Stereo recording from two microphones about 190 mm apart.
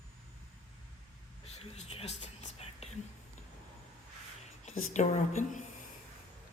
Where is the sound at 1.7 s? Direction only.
35° left (ahead or behind).